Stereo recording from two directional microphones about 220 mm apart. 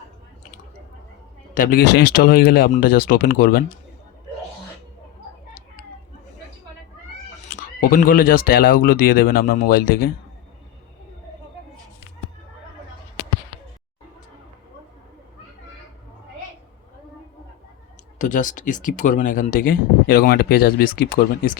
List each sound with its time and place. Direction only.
1.5 s speech: 40° left (ahead or behind)
7.5 s speech: 40° left (ahead or behind)
18.2 s speech: 35° left (ahead or behind)